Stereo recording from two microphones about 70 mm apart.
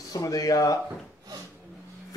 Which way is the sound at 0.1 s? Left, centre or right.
Left.